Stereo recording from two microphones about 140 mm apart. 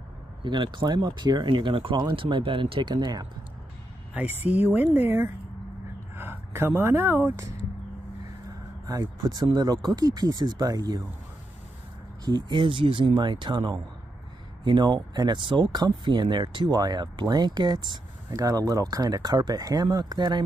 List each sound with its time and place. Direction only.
0.4 s speech: 35° right (ahead or behind)
4.1 s speech: 10° right (ahead or behind)
8.8 s speech: 30° right (ahead or behind)
12.3 s speech: 30° right (ahead or behind)